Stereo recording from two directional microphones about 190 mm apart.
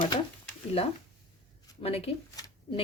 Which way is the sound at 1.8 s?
30° left (ahead or behind).